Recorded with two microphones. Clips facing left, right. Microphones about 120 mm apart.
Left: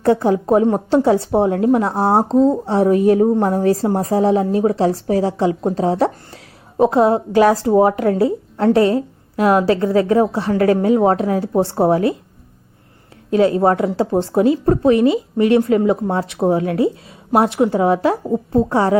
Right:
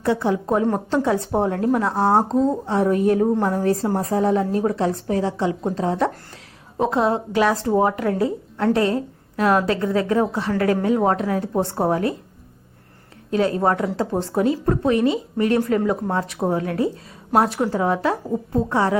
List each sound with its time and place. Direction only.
0.0 s a woman's voice: 45° left (ahead or behind)
0.5 s a woman's voice: 25° left (ahead or behind)
13.3 s a woman's voice: 30° left (ahead or behind)